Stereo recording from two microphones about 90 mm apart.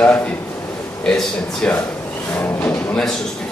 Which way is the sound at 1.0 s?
5° left (ahead or behind).